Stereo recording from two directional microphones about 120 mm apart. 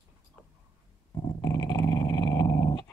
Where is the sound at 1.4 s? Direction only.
25° left (ahead or behind).